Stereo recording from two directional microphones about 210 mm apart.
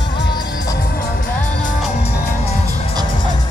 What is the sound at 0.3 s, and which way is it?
Music, 20° left (ahead or behind).